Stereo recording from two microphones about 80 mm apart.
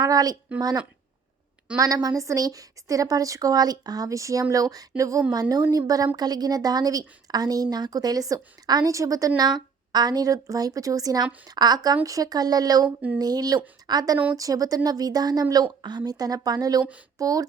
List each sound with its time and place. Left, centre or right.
0.0 s a woman's voice: right
1.8 s a woman's voice: right
5.3 s a woman's voice: right
9.4 s a woman's voice: right